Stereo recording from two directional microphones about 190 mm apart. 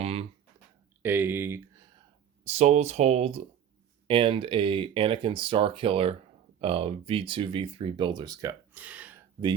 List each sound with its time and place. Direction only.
0.0 s a sound: 30° right (ahead or behind)
1.0 s speech: 10° right (ahead or behind)
2.4 s speech: 35° right (ahead or behind); by 9.2 s 10° right (ahead or behind)